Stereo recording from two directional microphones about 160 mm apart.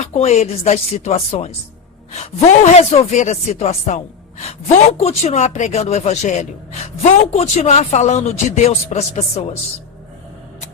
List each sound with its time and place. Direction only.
0.0 s speech: 45° left (ahead or behind)